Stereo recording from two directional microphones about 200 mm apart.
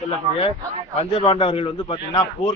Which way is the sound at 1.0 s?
30° left (ahead or behind).